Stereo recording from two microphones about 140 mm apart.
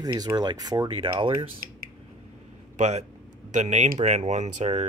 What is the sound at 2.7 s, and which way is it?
Speech, 55° right (ahead or behind).